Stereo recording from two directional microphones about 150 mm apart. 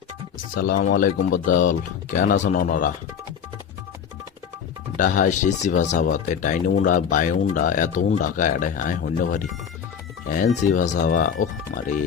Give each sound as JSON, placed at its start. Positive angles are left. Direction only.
{"t": 0.5, "sound": "speech", "side_deg": 70}
{"t": 4.9, "sound": "speech", "side_deg": 60}